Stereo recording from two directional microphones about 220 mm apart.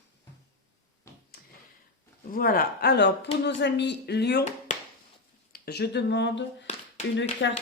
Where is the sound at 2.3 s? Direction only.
40° left (ahead or behind).